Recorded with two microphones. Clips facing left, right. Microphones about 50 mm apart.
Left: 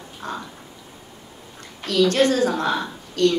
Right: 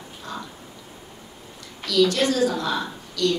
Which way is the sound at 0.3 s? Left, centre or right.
Left.